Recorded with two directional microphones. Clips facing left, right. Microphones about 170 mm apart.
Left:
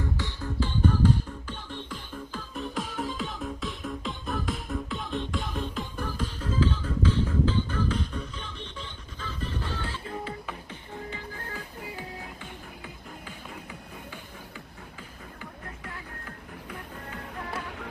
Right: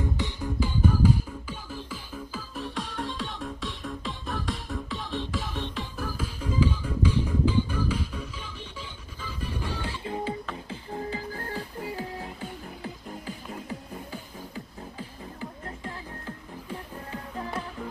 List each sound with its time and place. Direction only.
0.0 s music: 15° right (ahead or behind)
10.7 s music: 35° right (ahead or behind)